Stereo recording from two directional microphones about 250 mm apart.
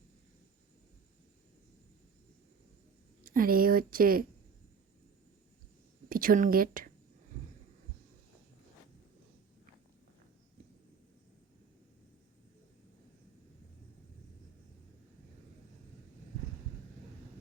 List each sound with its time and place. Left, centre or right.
3.2 s speech: right
6.1 s speech: right